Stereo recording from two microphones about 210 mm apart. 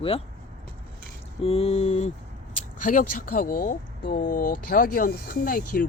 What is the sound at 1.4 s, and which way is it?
Speech, 30° left (ahead or behind).